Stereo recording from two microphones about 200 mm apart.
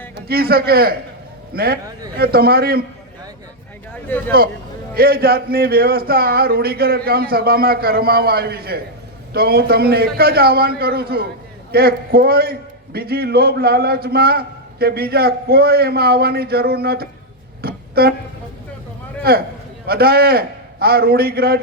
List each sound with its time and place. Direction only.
0.3 s a man's voice: 50° right (ahead or behind)
4.1 s speech: 10° left (ahead or behind)
4.9 s a man's voice: 50° right (ahead or behind)
17.6 s a sound: 50° right (ahead or behind)
19.3 s a man's voice: 50° right (ahead or behind)